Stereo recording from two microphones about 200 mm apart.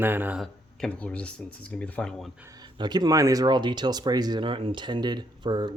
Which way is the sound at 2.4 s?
15° right (ahead or behind).